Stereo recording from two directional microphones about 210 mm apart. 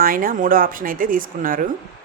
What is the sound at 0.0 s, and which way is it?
Speech, 40° right (ahead or behind).